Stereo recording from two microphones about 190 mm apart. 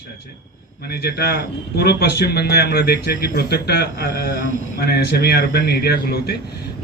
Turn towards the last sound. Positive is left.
turn(degrees=55)  # may be behind; listen again after turning